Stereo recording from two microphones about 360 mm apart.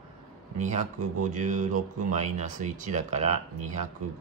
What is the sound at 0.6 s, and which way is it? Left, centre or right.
Speech, centre.